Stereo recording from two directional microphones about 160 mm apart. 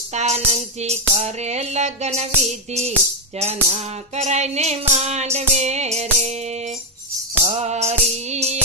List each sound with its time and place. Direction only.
0.1 s music: 45° right (ahead or behind)
7.4 s music: 45° right (ahead or behind)